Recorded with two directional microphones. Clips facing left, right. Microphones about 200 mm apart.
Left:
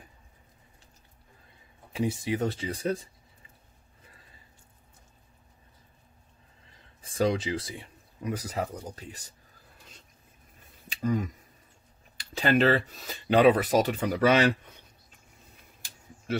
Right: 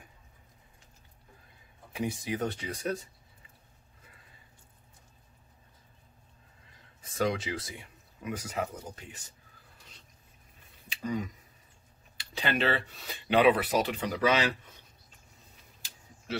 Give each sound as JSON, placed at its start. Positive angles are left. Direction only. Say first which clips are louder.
{"t": 2.2, "sound": "speech", "louder": "left 4 dB", "side_deg": 25}
{"t": 7.0, "sound": "speech", "louder": "left 4 dB", "side_deg": 30}
{"t": 10.9, "sound": "a sound", "louder": "left 5 dB", "side_deg": 45}
{"t": 12.2, "sound": "speech", "louder": "left 7 dB", "side_deg": 45}